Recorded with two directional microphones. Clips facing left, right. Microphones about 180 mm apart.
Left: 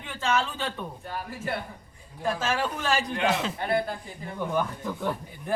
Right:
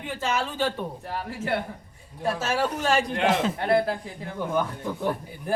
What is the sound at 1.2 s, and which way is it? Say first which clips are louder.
Speech: right 5 dB; 65° right (ahead or behind).